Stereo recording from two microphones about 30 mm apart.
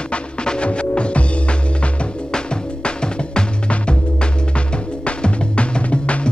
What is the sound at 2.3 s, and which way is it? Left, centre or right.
Music, left.